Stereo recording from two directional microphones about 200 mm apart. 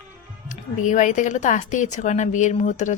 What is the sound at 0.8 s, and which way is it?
A woman's voice, 40° left (ahead or behind).